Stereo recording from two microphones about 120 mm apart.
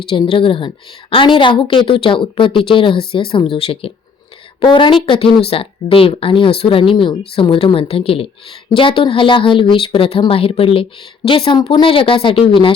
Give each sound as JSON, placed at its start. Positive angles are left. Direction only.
{"t": 0.1, "sound": "a woman's voice", "side_deg": 50}